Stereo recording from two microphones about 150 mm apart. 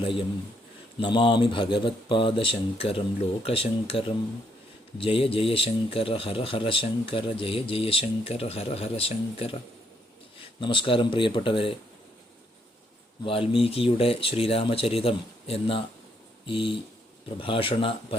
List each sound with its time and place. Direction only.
0.0 s speech: 35° left (ahead or behind)
10.6 s speech: 35° left (ahead or behind)
13.5 s speech: 40° left (ahead or behind)